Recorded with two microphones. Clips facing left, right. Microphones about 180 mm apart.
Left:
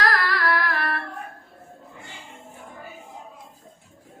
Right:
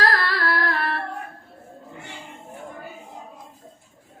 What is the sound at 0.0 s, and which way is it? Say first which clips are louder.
Carnatic music: even; 30° right (ahead or behind).